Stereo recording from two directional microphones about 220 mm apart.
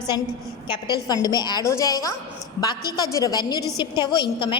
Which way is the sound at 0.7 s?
20° left (ahead or behind).